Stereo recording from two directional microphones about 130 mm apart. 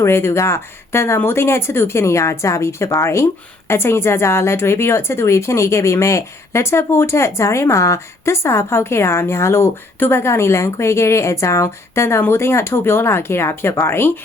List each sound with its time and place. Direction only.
0.0 s a woman's voice: 20° left (ahead or behind)